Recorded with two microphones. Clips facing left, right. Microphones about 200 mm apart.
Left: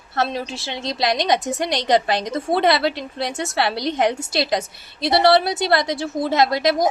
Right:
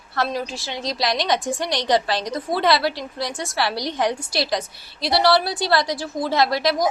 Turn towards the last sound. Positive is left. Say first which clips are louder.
# left 2 dB
turn(degrees=20)  # may be behind; listen again after turning